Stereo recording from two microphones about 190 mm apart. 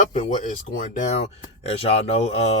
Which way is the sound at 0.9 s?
35° left (ahead or behind).